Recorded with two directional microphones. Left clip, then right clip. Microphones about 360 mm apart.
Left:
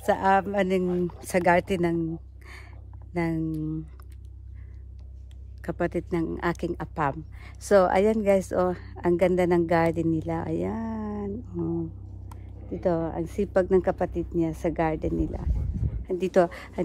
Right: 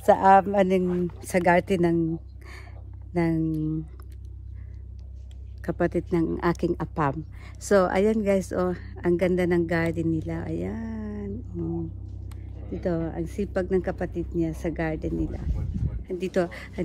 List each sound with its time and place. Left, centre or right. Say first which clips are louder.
0.0 s speech: right 5 dB; centre
1.2 s speech: right 1 dB; centre
5.6 s speech: right 2 dB; centre